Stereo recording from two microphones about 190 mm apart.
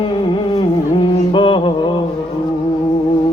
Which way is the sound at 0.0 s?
25° left (ahead or behind).